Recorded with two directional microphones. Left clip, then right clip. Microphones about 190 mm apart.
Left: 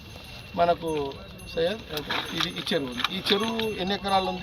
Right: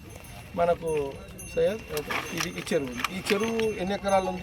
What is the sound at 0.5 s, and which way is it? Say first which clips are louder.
Speech: left 1 dB; 5° right (ahead or behind).